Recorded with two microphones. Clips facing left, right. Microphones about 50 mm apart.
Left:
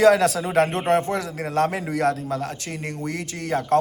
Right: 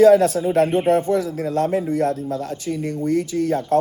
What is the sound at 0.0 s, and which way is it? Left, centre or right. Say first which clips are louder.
A man's voice: right 4 dB; left.